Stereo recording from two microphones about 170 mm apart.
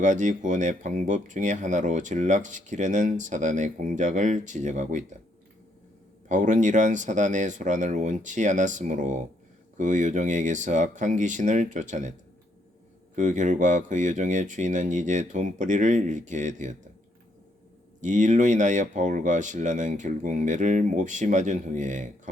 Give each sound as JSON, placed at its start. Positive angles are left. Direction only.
{"t": 0.0, "sound": "speech", "side_deg": -45}
{"t": 6.2, "sound": "speech", "side_deg": -45}
{"t": 13.1, "sound": "speech", "side_deg": -50}
{"t": 18.0, "sound": "speech", "side_deg": -45}